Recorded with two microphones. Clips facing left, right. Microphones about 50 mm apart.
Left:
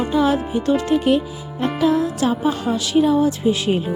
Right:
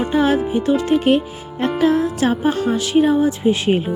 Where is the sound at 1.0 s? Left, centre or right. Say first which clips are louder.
Right 2 dB; right.